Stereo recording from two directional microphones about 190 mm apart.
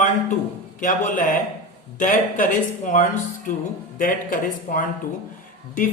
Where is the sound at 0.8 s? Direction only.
45° left (ahead or behind).